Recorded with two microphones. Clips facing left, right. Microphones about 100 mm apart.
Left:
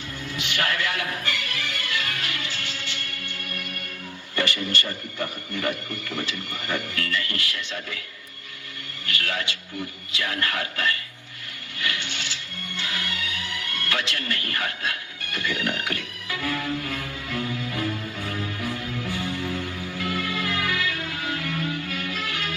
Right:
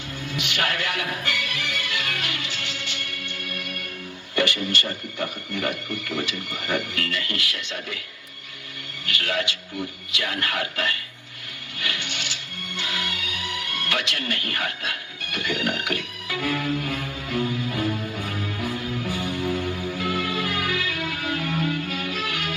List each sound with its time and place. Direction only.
0.3 s music: 20° right (ahead or behind)
4.4 s a man's voice: 20° right (ahead or behind)
9.2 s a man's voice: 20° right (ahead or behind)
12.7 s music: 20° right (ahead or behind)
13.7 s speech: 20° right (ahead or behind)
15.4 s music: 20° right (ahead or behind)
20.9 s music: 25° left (ahead or behind)
21.3 s music: 25° right (ahead or behind)